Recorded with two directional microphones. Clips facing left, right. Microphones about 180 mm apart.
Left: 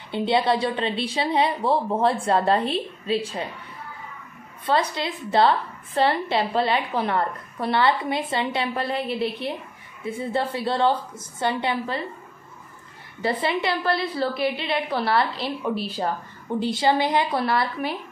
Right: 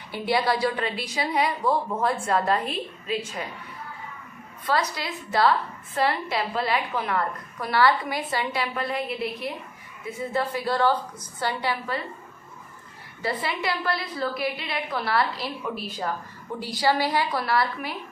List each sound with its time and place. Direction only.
0.1 s a woman's voice: 25° left (ahead or behind)
4.6 s a woman's voice: 25° left (ahead or behind)
13.2 s a woman's voice: 25° left (ahead or behind)